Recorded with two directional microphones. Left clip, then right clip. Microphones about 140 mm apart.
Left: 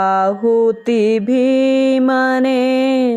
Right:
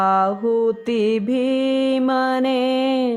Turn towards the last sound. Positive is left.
turn(degrees=30)  # may be behind; listen again after turning